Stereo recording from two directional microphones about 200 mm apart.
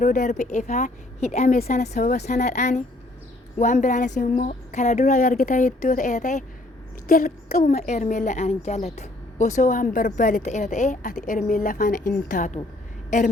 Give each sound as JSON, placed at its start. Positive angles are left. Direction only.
{"t": 0.0, "sound": "a woman's voice", "side_deg": 40}
{"t": 7.1, "sound": "speech", "side_deg": 45}
{"t": 7.7, "sound": "a woman's voice", "side_deg": 35}